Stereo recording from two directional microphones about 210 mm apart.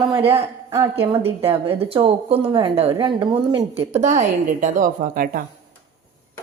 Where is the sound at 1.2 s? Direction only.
25° right (ahead or behind); by 5.4 s 45° right (ahead or behind).